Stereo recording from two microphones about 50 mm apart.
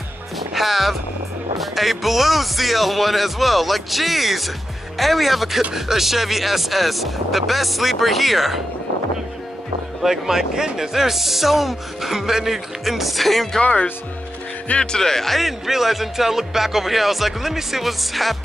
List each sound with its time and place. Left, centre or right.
0.4 s music: centre
1.6 s speech: centre
10.0 s speech: centre
13.6 s speech: left
14.8 s speech: centre